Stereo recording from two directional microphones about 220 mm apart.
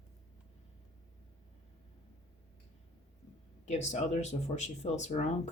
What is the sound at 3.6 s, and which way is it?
Speech, 30° left (ahead or behind).